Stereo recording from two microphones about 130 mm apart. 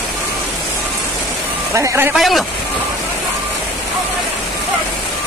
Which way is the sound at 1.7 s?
20° right (ahead or behind).